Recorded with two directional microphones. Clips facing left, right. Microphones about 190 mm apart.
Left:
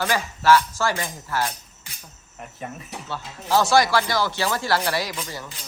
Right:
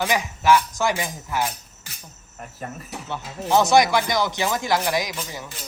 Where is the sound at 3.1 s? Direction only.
20° right (ahead or behind).